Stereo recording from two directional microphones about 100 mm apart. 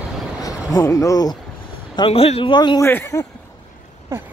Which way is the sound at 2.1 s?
85° left.